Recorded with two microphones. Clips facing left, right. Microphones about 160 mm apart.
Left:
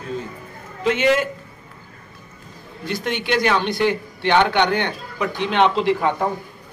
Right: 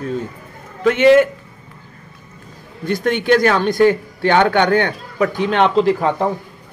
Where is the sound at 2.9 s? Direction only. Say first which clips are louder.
Right 8 dB; 50° right (ahead or behind).